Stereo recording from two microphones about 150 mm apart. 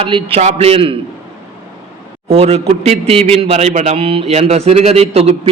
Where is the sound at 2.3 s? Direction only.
45° right (ahead or behind).